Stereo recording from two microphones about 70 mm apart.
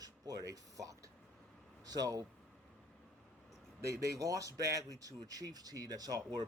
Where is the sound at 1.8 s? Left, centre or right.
Right.